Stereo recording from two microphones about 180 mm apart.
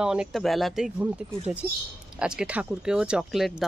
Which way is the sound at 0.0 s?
5° right (ahead or behind).